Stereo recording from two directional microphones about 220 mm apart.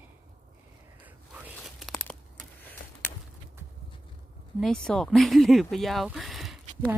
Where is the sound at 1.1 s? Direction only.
5° right (ahead or behind).